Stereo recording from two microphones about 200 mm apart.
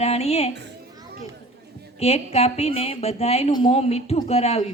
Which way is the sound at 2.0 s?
30° left (ahead or behind).